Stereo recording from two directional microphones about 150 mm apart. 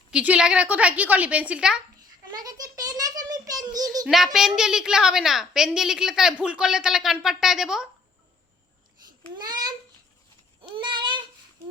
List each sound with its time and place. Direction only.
0.1 s a woman's voice: 5° right (ahead or behind)
2.0 s a sound: 25° right (ahead or behind)
4.0 s a woman's voice: centre (ahead or behind)
9.0 s babbling: 30° right (ahead or behind)
10.6 s child singing: 30° right (ahead or behind)